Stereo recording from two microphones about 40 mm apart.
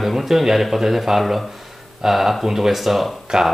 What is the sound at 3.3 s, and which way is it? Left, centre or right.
Speech, centre.